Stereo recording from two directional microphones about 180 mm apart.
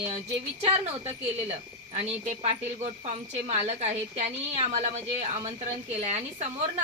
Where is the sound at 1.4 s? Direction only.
35° right (ahead or behind).